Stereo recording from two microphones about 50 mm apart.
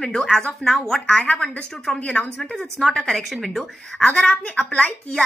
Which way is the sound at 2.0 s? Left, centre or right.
Centre.